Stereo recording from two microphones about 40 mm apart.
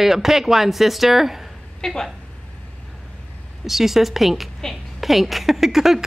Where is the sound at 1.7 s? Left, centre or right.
Centre.